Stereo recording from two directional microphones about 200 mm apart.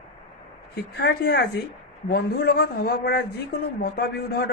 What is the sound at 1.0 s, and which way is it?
A woman's voice, 55° left (ahead or behind).